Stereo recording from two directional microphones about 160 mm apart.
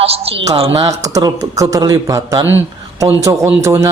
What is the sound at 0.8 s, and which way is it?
A man's voice, 20° right (ahead or behind).